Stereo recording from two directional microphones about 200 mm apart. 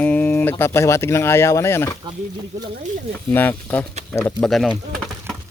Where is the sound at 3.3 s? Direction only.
10° left (ahead or behind).